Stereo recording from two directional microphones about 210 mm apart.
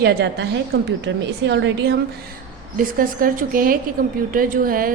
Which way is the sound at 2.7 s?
40° right (ahead or behind).